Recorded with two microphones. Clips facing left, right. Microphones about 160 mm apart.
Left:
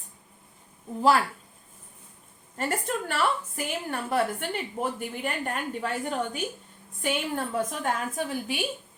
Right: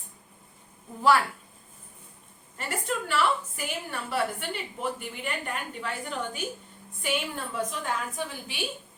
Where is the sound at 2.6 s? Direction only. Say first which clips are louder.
Left 3 dB; 50° left (ahead or behind).